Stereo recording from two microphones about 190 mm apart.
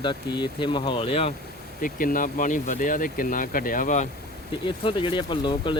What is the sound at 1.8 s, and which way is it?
Speech, 50° left (ahead or behind).